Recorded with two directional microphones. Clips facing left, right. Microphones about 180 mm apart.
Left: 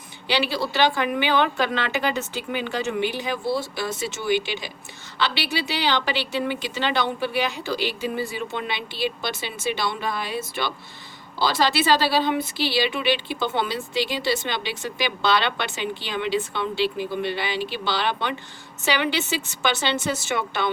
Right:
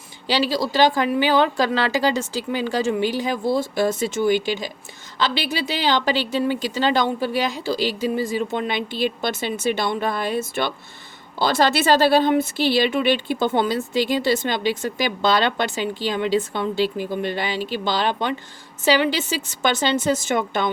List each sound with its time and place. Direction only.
0.3 s a woman's voice: 40° right (ahead or behind)
19.6 s a woman's voice: 45° right (ahead or behind)